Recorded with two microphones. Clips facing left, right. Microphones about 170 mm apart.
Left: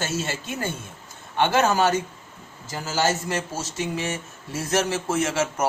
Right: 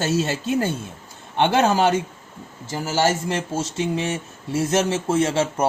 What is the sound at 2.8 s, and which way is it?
Speech, 10° right (ahead or behind).